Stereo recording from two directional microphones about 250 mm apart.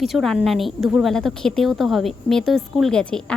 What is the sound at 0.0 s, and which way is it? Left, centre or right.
A woman's voice, centre.